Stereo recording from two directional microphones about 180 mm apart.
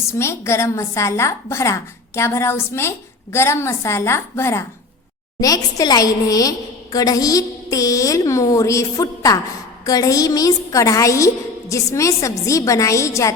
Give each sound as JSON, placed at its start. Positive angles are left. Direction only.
{"t": 0.2, "sound": "a woman's voice", "side_deg": 15}